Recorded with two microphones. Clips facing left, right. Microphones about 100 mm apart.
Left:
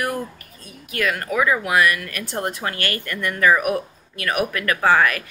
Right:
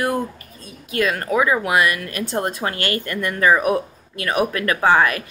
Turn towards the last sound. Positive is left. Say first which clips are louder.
# right 1 dB
turn(degrees=-25)  # may be behind; listen again after turning